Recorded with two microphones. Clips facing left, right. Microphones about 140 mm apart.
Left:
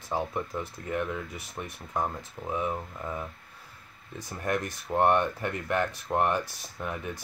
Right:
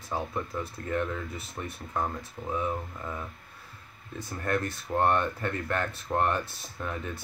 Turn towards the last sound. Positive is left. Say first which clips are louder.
# even
turn(degrees=15)  # may be behind; listen again after turning